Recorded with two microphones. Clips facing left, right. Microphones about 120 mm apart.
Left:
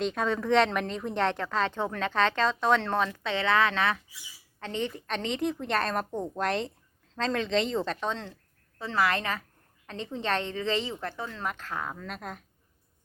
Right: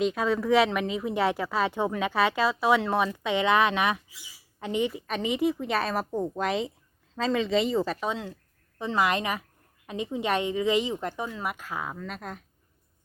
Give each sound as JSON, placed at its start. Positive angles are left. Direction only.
{"t": 0.0, "sound": "a woman's voice", "side_deg": -5}